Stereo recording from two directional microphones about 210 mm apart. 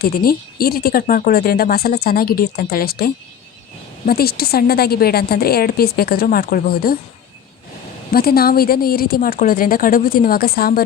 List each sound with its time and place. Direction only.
0.0 s speech: 45° left (ahead or behind)
8.1 s speech: 45° left (ahead or behind)